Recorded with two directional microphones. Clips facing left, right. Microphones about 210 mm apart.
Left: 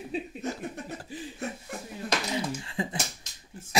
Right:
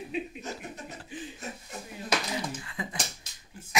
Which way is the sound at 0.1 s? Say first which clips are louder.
Even; 35° left (ahead or behind).